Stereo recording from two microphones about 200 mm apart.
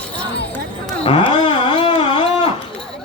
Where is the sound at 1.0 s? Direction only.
25° left (ahead or behind).